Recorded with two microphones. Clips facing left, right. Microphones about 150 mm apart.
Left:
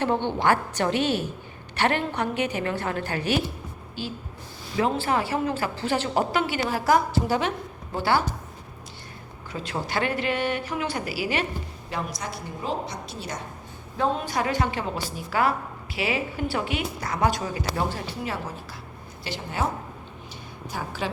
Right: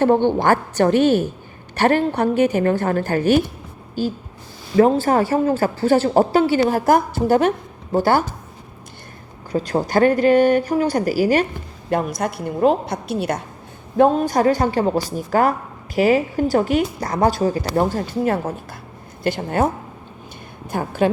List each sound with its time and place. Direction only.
0.0 s a woman's voice: 45° right (ahead or behind)
9.5 s a woman's voice: 40° right (ahead or behind)
11.9 s a woman's voice: 55° right (ahead or behind)
14.2 s a woman's voice: 40° right (ahead or behind)
20.7 s a woman's voice: 55° right (ahead or behind)